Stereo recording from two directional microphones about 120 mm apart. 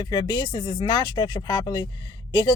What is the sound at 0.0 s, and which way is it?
A woman's voice, 35° left (ahead or behind).